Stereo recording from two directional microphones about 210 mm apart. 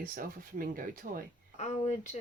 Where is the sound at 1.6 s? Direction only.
35° left (ahead or behind).